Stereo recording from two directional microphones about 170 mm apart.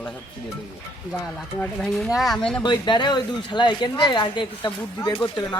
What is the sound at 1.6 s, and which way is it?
Speech, 5° left (ahead or behind).